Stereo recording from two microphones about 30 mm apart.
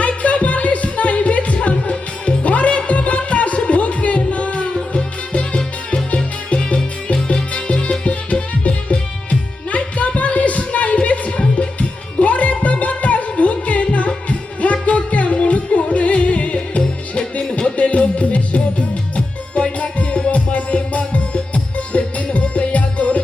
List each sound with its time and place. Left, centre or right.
0.0 s music: left
7.5 s music: left